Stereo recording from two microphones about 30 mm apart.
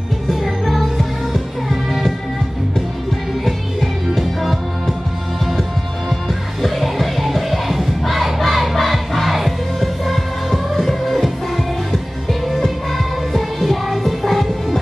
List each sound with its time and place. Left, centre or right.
0.4 s music: centre
3.4 s music: centre
5.6 s music: centre